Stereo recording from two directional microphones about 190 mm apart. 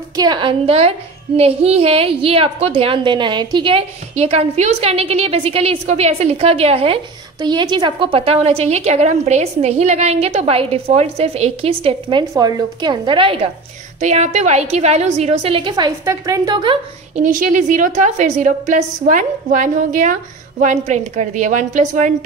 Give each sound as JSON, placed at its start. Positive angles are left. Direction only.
{"t": 0.1, "sound": "a woman's voice", "side_deg": -20}
{"t": 17.1, "sound": "a woman's voice", "side_deg": -45}